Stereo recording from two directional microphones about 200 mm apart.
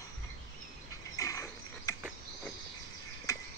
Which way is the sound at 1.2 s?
15° left (ahead or behind).